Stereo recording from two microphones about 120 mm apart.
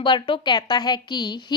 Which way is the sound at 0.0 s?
45° left (ahead or behind).